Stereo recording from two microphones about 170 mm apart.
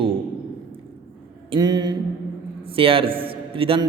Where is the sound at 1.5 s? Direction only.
25° right (ahead or behind).